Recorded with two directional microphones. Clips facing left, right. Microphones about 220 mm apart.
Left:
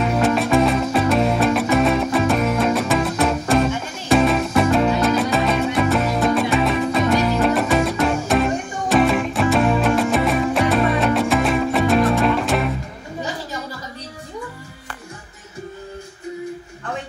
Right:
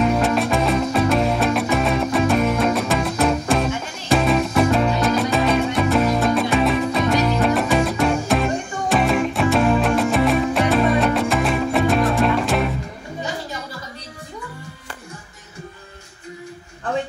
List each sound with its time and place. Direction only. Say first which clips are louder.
0.0 s music: even; centre (ahead or behind)